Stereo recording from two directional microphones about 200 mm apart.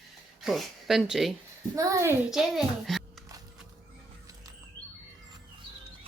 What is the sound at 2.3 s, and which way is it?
Speech, centre (ahead or behind).